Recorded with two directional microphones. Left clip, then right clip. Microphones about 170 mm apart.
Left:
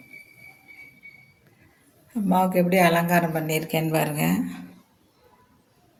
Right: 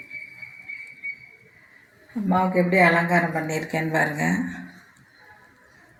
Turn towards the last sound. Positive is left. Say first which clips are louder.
# right 1 dB
turn(degrees=30)  # may be behind; listen again after turning